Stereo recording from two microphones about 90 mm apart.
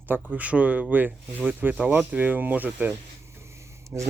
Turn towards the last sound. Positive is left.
turn(degrees=-20)  # may be behind; listen again after turning